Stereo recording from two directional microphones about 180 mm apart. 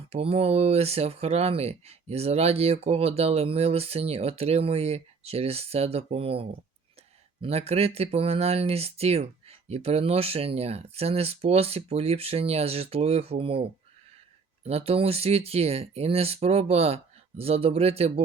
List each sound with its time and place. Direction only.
0.1 s speech: 30° right (ahead or behind)